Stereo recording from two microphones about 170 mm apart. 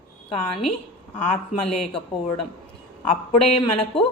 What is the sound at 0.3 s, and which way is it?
Speech, 30° left (ahead or behind).